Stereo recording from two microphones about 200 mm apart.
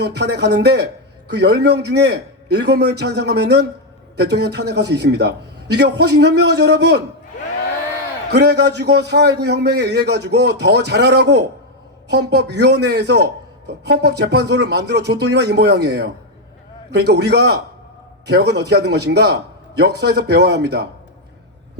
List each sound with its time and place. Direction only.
0.0 s a man's voice: 55° right (ahead or behind)
8.3 s a man's voice: 55° right (ahead or behind)